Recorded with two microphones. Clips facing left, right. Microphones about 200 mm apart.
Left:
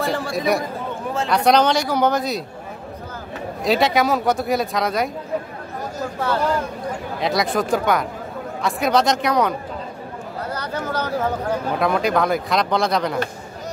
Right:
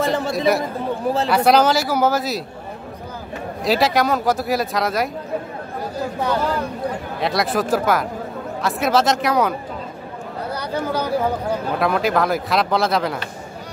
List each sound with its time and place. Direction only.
0.1 s a man's voice: 25° right (ahead or behind)
1.0 s speech: 35° right (ahead or behind)
1.3 s speech: 5° right (ahead or behind)
3.6 s speech: centre (ahead or behind)
7.2 s speech: centre (ahead or behind)